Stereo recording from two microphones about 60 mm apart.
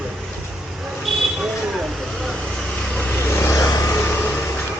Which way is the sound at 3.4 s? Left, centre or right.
Left.